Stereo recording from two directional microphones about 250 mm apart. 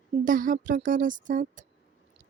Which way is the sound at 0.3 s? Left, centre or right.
Right.